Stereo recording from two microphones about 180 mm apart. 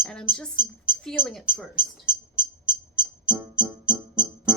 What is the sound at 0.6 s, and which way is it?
Speech, 25° right (ahead or behind).